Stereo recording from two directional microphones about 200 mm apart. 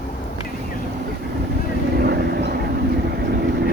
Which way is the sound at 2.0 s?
55° right (ahead or behind).